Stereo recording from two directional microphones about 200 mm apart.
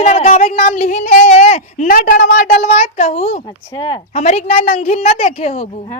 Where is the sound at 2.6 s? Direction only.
35° left (ahead or behind).